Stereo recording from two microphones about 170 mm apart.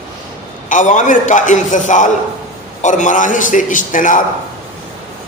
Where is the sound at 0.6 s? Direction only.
45° left (ahead or behind).